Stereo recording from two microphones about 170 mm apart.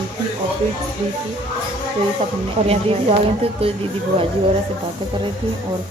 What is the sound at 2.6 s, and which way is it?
Speech, 35° right (ahead or behind).